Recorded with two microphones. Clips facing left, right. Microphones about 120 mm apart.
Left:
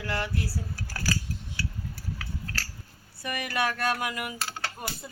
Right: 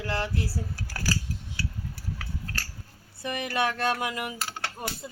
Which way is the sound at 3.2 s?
25° right (ahead or behind).